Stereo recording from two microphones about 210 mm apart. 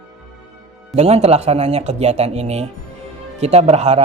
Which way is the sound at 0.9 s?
30° right (ahead or behind).